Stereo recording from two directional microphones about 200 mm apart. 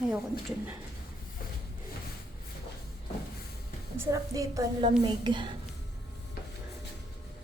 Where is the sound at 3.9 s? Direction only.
15° right (ahead or behind).